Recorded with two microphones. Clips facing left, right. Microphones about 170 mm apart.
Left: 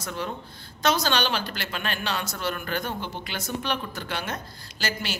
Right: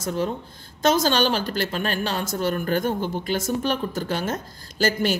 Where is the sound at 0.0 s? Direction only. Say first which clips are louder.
Right 7 dB; 40° right (ahead or behind).